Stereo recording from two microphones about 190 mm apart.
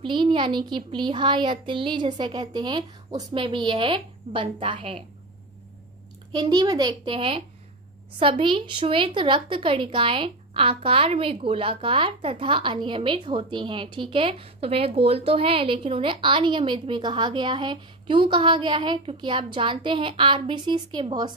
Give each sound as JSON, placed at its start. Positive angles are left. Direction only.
{"t": 0.0, "sound": "a woman's voice", "side_deg": -25}
{"t": 6.3, "sound": "a woman's voice", "side_deg": -20}